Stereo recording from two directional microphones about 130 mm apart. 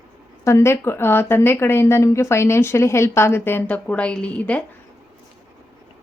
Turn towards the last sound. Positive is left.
turn(degrees=10)  # may be behind; listen again after turning